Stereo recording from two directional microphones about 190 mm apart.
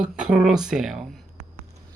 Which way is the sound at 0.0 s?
5° right (ahead or behind).